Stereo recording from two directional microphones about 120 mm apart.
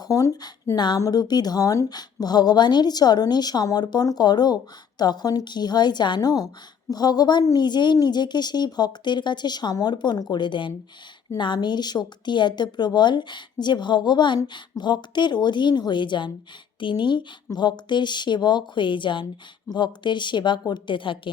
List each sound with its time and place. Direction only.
0.1 s speech: 30° left (ahead or behind); by 21.2 s 45° left (ahead or behind)